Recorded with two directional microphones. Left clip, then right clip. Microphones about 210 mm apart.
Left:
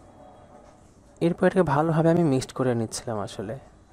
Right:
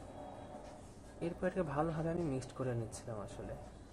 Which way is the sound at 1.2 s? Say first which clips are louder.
Left 16 dB; 45° left (ahead or behind).